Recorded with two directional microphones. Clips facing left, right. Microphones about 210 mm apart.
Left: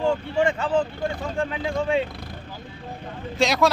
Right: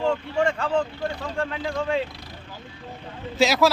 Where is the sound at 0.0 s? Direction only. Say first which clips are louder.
Left 1 dB; 5° left (ahead or behind).